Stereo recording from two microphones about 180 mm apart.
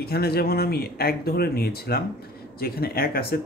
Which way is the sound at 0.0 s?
60° left (ahead or behind).